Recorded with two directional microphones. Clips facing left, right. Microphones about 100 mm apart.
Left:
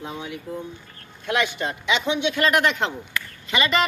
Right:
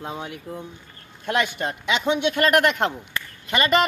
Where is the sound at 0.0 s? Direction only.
45° right (ahead or behind).